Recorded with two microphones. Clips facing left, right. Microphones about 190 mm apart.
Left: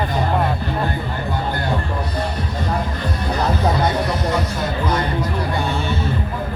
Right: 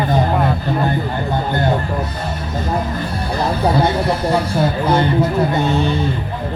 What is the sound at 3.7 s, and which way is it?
Speech, 30° right (ahead or behind).